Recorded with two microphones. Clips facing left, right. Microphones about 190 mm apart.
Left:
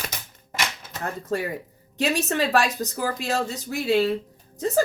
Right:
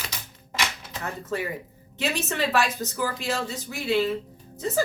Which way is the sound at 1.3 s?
40° left (ahead or behind).